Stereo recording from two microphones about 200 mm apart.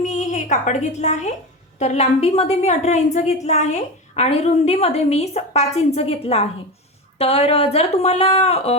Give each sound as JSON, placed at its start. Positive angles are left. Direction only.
{"t": 0.0, "sound": "a woman's voice", "side_deg": 40}